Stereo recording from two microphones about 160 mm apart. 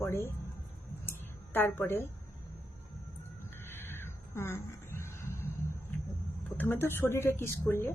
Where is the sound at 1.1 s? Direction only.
15° left (ahead or behind).